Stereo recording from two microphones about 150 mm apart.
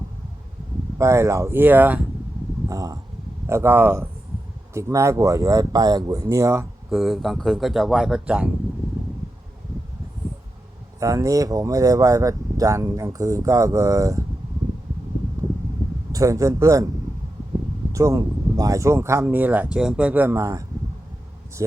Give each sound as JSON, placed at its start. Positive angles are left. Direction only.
{"t": 0.9, "sound": "speech", "side_deg": -20}
{"t": 2.6, "sound": "speech", "side_deg": -25}
{"t": 6.9, "sound": "speech", "side_deg": 0}
{"t": 11.0, "sound": "speech", "side_deg": -20}
{"t": 16.1, "sound": "speech", "side_deg": -20}
{"t": 17.9, "sound": "speech", "side_deg": -20}